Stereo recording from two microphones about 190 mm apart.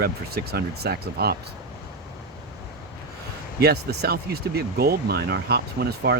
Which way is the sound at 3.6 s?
55° right (ahead or behind).